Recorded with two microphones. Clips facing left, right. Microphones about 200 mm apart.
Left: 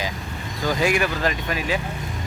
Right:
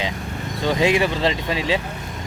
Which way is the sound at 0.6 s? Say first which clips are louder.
Right 3 dB; 25° right (ahead or behind).